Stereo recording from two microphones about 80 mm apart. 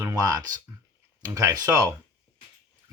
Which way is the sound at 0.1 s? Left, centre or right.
Right.